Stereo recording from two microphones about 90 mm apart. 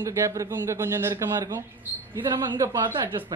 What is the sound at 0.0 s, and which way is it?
Speech, 35° right (ahead or behind).